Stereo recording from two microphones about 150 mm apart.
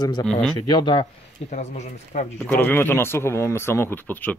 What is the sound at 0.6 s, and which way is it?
Speech, 30° left (ahead or behind).